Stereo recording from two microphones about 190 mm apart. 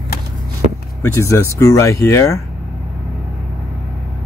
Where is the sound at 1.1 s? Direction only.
15° left (ahead or behind).